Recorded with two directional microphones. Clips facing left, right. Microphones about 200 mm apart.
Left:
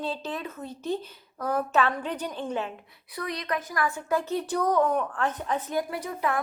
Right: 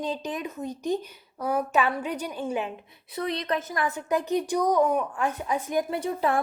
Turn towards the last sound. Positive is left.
turn(degrees=-30)  # may be behind; listen again after turning